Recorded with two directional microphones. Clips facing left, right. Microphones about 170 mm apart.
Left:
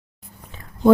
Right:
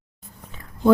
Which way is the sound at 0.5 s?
30° left (ahead or behind).